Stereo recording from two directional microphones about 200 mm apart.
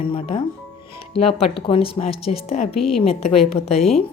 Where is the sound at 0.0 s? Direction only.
25° left (ahead or behind).